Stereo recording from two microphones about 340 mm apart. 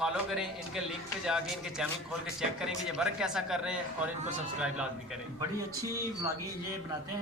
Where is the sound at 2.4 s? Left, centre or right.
Centre.